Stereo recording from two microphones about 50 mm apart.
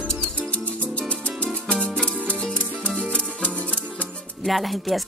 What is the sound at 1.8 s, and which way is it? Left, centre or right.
Music, left.